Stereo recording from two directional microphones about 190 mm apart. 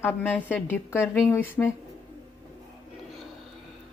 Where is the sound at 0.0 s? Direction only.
10° left (ahead or behind).